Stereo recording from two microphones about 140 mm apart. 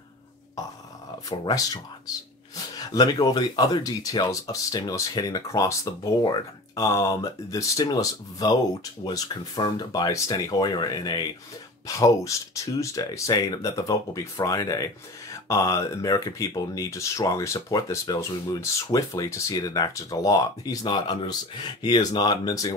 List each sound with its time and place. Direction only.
1.4 s speech: 25° left (ahead or behind)
2.8 s speech: 25° left (ahead or behind)